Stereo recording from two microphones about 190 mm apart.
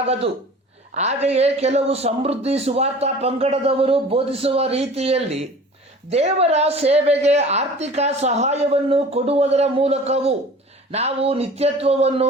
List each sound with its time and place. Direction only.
0.0 s a man's voice: 30° right (ahead or behind)